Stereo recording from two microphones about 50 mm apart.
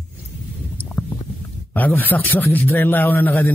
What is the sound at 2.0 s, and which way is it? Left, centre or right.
A man's voice, left.